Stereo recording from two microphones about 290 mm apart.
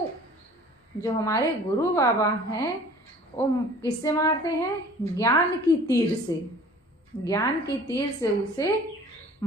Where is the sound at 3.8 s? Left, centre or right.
Centre.